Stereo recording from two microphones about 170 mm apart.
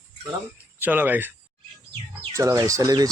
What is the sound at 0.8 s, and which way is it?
Speech, 10° right (ahead or behind).